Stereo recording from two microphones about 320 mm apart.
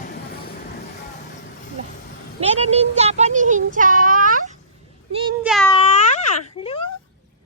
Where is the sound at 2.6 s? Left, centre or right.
Centre.